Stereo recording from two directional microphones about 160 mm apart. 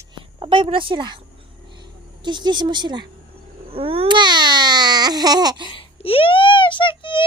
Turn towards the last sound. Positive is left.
turn(degrees=30)  # may be behind; listen again after turning